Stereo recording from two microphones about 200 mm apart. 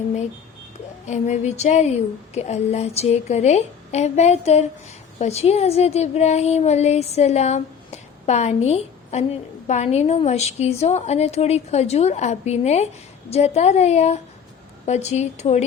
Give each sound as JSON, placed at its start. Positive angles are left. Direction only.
{"t": 1.0, "sound": "a woman's voice", "side_deg": 35}